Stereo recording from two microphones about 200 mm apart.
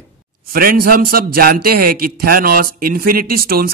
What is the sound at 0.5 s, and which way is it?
A man's voice, 45° right (ahead or behind).